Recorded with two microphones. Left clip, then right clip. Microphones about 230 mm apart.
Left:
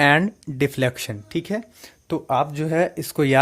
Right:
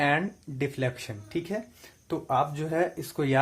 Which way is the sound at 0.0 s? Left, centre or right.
Left.